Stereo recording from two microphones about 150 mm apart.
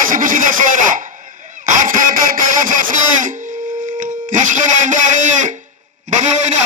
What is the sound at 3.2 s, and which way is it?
Speech, 60° right (ahead or behind).